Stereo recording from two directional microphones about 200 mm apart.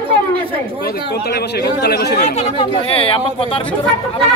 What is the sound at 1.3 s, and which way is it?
Speech, 55° left (ahead or behind).